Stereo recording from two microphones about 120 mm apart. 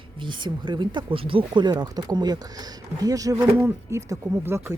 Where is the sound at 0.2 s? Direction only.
40° right (ahead or behind).